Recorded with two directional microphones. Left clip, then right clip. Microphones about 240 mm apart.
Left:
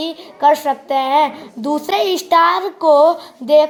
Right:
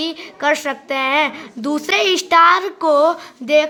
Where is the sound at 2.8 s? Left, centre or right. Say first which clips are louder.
Left 3 dB; right.